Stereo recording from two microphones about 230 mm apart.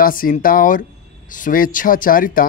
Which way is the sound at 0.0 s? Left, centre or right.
Left.